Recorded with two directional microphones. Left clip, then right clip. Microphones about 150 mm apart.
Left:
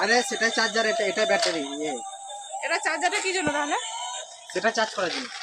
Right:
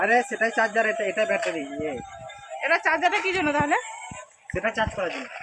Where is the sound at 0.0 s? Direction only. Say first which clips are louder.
Right 1 dB; 40° left (ahead or behind).